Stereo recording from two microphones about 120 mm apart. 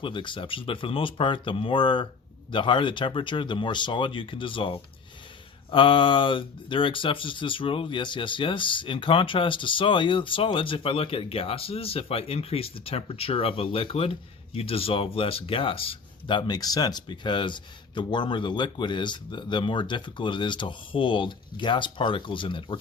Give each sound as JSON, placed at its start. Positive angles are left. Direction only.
{"t": 0.0, "sound": "speech", "side_deg": 45}